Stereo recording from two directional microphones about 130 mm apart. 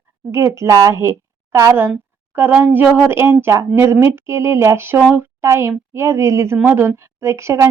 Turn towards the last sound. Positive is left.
turn(degrees=-20)  # may be behind; listen again after turning